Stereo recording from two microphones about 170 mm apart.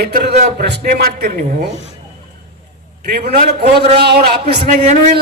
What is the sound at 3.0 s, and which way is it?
Speech, 65° right (ahead or behind).